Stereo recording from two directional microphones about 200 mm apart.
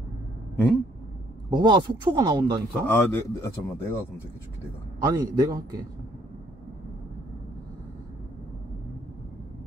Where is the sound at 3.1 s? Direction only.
10° left (ahead or behind).